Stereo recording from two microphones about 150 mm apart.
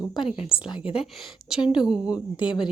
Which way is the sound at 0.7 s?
35° left (ahead or behind).